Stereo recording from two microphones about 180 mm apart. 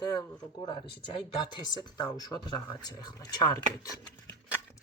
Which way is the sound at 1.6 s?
25° left (ahead or behind).